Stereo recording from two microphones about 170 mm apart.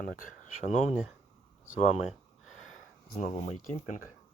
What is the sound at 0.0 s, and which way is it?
Speech, 50° left (ahead or behind).